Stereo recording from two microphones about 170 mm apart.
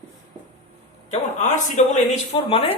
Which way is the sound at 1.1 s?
45° left (ahead or behind).